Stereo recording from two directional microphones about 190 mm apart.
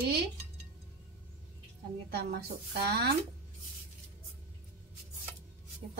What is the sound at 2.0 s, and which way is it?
A woman's voice, 55° right (ahead or behind).